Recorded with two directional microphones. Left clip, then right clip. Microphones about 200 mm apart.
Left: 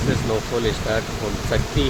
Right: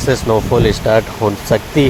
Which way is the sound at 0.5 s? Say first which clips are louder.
Right 12 dB; 35° right (ahead or behind).